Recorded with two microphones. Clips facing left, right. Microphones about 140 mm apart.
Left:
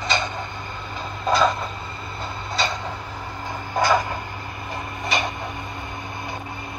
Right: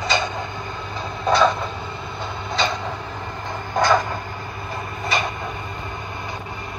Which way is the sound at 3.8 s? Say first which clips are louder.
Right 2 dB; 10° left (ahead or behind).